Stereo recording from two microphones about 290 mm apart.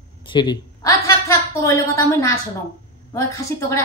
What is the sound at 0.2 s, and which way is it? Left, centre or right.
A woman's voice, centre.